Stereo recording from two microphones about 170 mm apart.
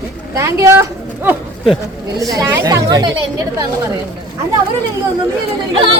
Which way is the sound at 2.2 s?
20° right (ahead or behind).